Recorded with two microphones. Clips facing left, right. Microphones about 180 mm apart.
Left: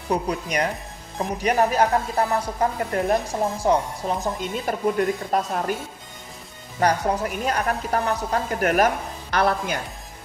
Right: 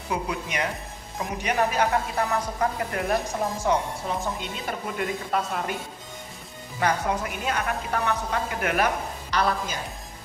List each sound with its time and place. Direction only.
0.1 s a woman's voice: 40° left (ahead or behind)
6.7 s a woman's voice: 40° left (ahead or behind)
9.3 s speech: 55° left (ahead or behind)